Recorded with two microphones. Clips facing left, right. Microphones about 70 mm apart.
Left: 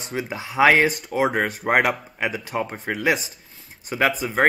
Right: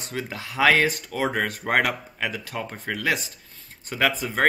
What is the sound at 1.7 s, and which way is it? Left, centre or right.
Speech, centre.